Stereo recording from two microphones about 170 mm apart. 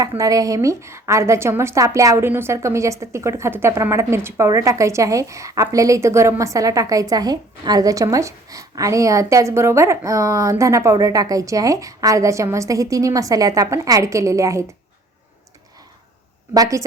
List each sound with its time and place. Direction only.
0.2 s a woman's voice: 20° right (ahead or behind)
16.6 s a woman's voice: 20° right (ahead or behind)